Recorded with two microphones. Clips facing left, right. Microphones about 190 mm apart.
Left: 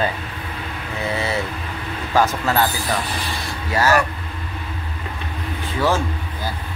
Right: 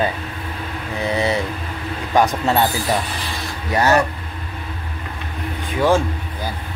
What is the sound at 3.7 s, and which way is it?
Speech, 20° right (ahead or behind).